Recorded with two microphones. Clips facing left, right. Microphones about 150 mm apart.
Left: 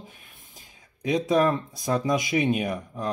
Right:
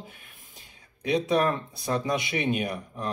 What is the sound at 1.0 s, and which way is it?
Speech, 40° left (ahead or behind).